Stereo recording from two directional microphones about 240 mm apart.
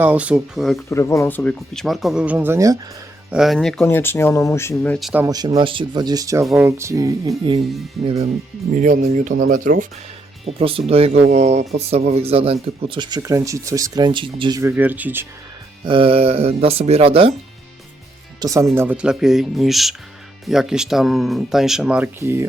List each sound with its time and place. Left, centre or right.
0.0 s speech: centre
0.9 s speech: centre
3.3 s speech: centre
5.2 s speech: centre
6.4 s speech: centre
6.7 s speech: centre
8.0 s speech: right
10.4 s speech: right
15.8 s speech: right
18.3 s speech: centre